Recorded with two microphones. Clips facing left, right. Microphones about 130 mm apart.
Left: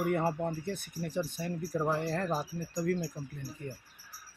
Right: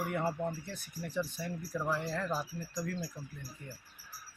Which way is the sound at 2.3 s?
25° left (ahead or behind).